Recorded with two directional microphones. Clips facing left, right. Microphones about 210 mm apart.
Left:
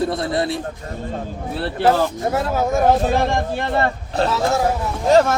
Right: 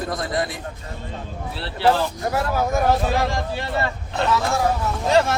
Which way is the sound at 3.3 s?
55° left (ahead or behind).